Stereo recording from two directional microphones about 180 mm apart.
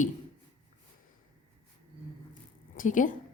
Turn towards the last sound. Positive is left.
turn(degrees=45)  # may be behind; listen again after turning